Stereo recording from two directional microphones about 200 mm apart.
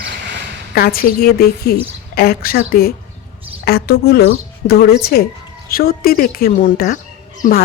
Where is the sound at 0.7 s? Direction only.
50° left (ahead or behind).